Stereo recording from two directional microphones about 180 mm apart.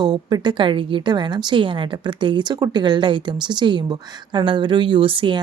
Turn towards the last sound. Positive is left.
turn(degrees=-30)  # may be behind; listen again after turning